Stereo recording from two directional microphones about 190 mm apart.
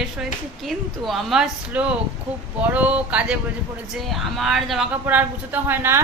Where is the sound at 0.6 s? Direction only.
Centre (ahead or behind).